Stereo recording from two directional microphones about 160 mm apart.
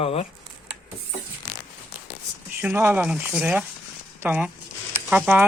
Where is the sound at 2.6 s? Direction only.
10° right (ahead or behind).